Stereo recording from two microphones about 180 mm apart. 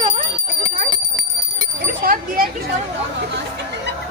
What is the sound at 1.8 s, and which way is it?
Speech, 55° right (ahead or behind).